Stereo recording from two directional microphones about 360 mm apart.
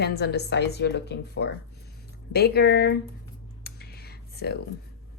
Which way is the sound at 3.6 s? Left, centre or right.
Left.